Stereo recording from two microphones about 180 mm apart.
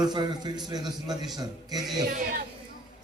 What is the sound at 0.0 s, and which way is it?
A man's voice, 20° right (ahead or behind).